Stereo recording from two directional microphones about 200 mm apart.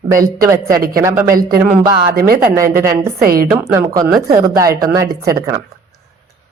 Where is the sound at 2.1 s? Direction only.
50° right (ahead or behind).